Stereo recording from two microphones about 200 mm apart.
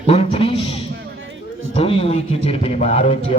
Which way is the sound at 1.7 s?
30° left (ahead or behind).